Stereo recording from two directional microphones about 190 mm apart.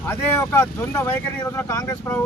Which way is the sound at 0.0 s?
10° left (ahead or behind).